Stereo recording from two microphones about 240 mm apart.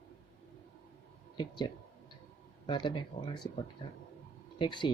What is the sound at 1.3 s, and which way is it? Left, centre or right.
Speech, centre.